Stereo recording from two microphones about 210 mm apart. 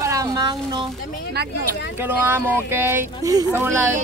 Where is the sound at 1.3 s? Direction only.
50° right (ahead or behind).